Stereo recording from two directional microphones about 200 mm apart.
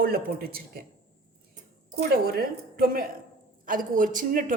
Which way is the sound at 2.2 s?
50° right (ahead or behind).